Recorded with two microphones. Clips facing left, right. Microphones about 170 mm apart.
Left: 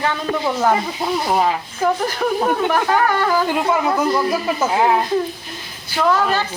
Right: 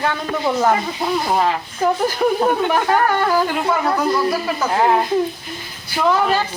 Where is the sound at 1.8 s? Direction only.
10° right (ahead or behind).